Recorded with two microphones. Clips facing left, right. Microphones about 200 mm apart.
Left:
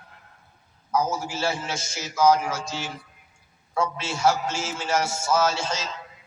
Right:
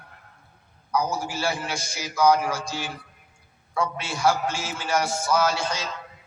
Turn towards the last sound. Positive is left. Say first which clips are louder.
# even
turn(degrees=25)  # may be behind; listen again after turning